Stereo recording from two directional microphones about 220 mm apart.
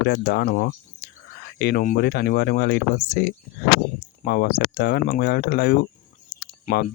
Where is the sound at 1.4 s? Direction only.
45° left (ahead or behind).